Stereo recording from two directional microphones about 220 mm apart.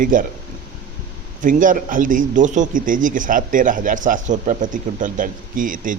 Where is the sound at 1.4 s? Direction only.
35° right (ahead or behind).